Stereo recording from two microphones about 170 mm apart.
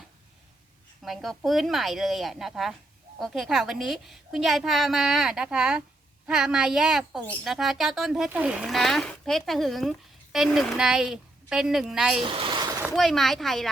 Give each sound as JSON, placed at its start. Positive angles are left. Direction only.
{"t": 1.0, "sound": "a woman's voice", "side_deg": 0}
{"t": 12.2, "sound": "a sound", "side_deg": -25}
{"t": 12.9, "sound": "a woman's voice", "side_deg": 0}